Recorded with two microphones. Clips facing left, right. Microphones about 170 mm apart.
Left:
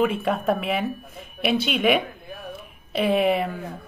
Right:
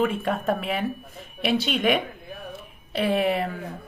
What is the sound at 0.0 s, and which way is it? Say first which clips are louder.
Speech: left 2 dB; 10° left (ahead or behind).